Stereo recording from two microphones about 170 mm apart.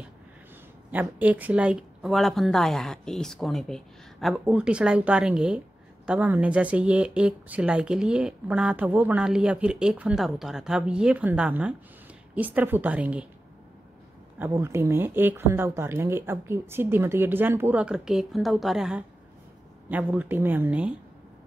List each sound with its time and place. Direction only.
0.9 s speech: 10° right (ahead or behind)
14.4 s speech: 15° right (ahead or behind)